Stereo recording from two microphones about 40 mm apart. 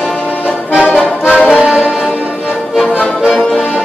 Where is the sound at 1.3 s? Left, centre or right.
Left.